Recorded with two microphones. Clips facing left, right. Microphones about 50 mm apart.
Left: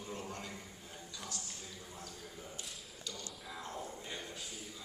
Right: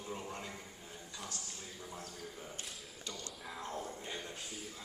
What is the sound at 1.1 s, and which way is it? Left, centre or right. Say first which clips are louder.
Speech: right 1 dB; right.